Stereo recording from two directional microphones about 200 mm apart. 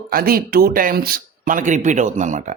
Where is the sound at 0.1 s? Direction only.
50° right (ahead or behind).